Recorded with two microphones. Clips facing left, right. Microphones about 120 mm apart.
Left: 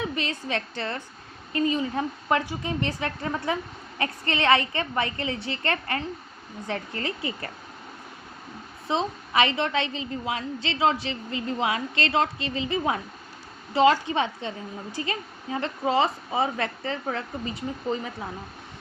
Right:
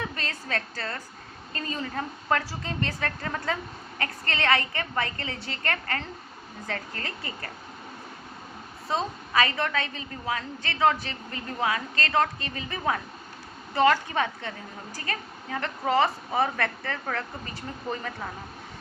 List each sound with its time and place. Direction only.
0.2 s a woman's voice: 20° left (ahead or behind)
8.9 s a woman's voice: 20° left (ahead or behind)